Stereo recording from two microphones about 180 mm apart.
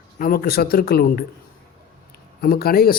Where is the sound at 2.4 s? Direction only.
60° left (ahead or behind).